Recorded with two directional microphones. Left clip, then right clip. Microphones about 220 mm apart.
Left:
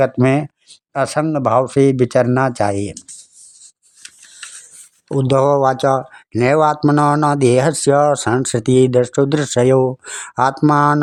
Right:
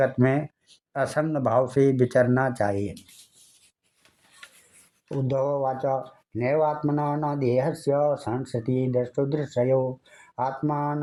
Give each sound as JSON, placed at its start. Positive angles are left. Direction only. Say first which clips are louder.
{"t": 0.0, "sound": "speech", "louder": "left 8 dB", "side_deg": 25}
{"t": 5.0, "sound": "speech", "louder": "left 12 dB", "side_deg": 35}